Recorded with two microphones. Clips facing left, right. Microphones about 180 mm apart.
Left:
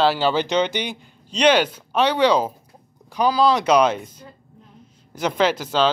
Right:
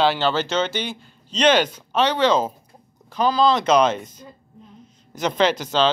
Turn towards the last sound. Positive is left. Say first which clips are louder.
# even
turn(degrees=5)  # may be behind; listen again after turning